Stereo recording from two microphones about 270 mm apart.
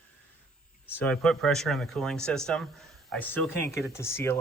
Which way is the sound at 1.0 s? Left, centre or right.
Centre.